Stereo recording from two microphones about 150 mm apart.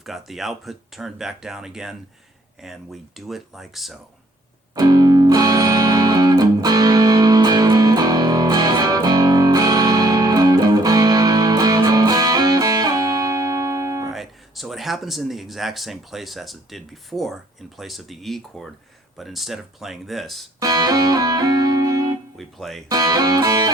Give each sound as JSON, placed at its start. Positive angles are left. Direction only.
{"t": 0.0, "sound": "speech", "side_deg": 0}
{"t": 4.7, "sound": "music", "side_deg": -25}
{"t": 14.1, "sound": "speech", "side_deg": 0}
{"t": 20.6, "sound": "music", "side_deg": -25}
{"t": 22.4, "sound": "speech", "side_deg": 0}
{"t": 22.9, "sound": "music", "side_deg": -25}